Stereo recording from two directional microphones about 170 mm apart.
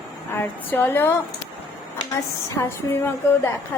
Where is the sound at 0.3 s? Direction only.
10° left (ahead or behind).